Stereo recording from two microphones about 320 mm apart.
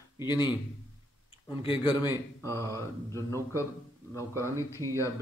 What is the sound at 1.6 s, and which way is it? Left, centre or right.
Speech, centre.